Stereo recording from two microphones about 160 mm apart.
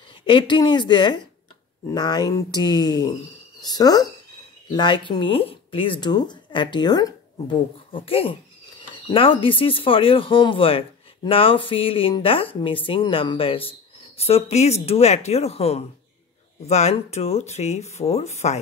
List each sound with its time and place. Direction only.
0.3 s speech: 30° left (ahead or behind)